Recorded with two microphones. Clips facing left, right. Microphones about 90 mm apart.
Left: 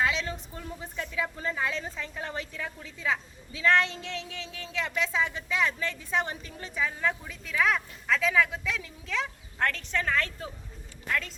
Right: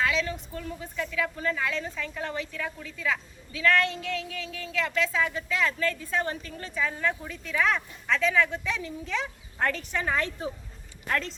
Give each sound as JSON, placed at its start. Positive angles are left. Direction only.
{"t": 0.0, "sound": "a woman's voice", "side_deg": 25}